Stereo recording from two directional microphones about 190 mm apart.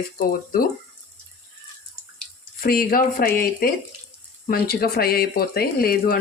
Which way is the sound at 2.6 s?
50° left (ahead or behind).